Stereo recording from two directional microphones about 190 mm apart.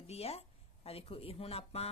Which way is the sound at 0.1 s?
30° left (ahead or behind).